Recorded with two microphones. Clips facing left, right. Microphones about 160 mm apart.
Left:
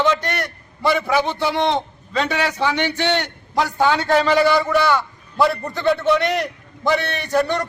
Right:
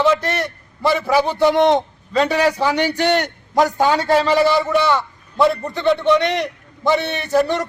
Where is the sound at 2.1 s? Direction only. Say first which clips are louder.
Right 5 dB; 35° right (ahead or behind).